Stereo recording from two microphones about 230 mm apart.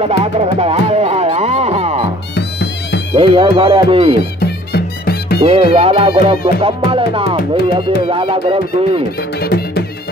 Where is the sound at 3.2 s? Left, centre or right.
Right.